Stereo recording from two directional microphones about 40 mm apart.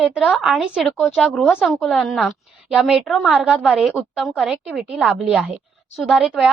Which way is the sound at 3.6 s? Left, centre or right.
Centre.